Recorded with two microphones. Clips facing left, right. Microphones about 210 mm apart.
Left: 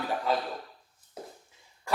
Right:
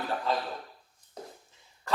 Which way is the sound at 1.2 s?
5° left (ahead or behind).